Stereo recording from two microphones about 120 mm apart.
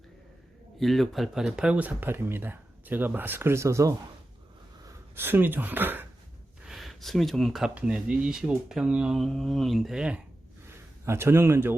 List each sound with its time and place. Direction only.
0.8 s speech: centre (ahead or behind); by 3.9 s 25° right (ahead or behind)
5.1 s speech: 15° right (ahead or behind)
6.7 s speech: centre (ahead or behind)
11.0 s speech: 20° right (ahead or behind)